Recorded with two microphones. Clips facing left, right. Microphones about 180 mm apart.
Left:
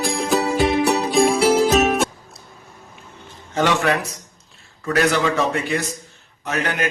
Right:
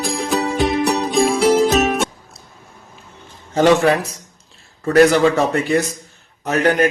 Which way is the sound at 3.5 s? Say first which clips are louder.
Right 6 dB; 35° right (ahead or behind).